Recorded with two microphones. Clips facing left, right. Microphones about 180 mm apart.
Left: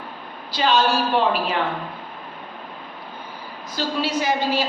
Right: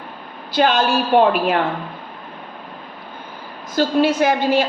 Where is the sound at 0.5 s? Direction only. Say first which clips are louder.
Right 3 dB; 55° right (ahead or behind).